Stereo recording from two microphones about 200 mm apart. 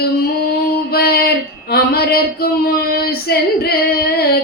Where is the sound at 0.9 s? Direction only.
50° left (ahead or behind).